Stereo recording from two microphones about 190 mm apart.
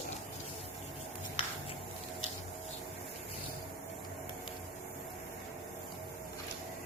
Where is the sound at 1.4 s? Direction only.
30° left (ahead or behind).